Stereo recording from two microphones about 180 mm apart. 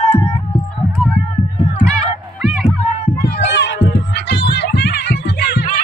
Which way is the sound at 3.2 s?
75° left (ahead or behind).